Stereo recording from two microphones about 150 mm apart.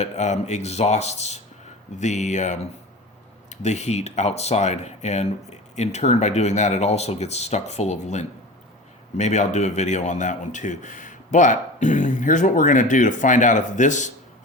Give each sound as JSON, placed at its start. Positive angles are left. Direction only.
{"t": 0.0, "sound": "speech", "side_deg": 50}